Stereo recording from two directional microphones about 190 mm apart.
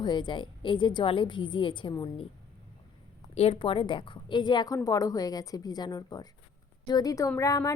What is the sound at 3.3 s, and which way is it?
A woman's voice, 30° left (ahead or behind).